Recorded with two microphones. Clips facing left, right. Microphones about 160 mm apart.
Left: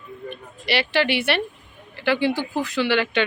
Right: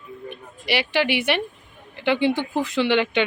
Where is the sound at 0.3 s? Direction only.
15° right (ahead or behind).